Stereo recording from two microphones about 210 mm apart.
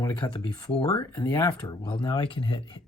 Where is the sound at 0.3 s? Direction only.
25° left (ahead or behind).